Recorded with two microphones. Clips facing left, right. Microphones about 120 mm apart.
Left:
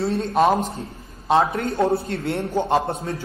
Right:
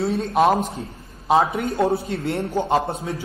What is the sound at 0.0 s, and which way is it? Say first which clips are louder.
A woman's voice: even; 5° right (ahead or behind).